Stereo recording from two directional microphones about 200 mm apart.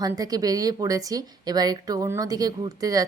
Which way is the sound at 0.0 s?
20° right (ahead or behind).